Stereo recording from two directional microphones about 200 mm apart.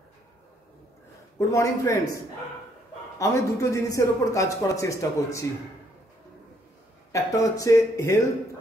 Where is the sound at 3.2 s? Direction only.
15° left (ahead or behind).